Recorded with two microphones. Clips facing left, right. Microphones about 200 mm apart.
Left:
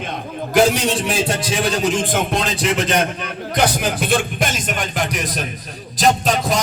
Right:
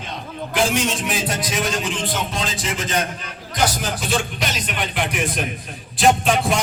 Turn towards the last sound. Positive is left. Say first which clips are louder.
# even
turn(degrees=40)  # may be behind; listen again after turning